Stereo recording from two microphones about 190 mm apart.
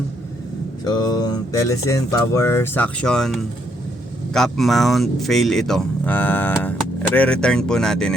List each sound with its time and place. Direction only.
0.9 s speech: 20° left (ahead or behind); by 8.1 s 5° left (ahead or behind)